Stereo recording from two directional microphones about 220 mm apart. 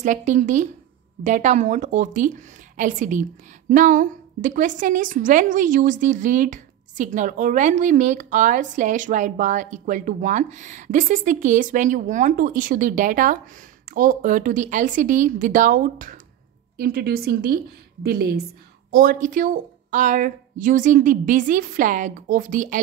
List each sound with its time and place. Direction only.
0.0 s a woman's voice: 35° right (ahead or behind)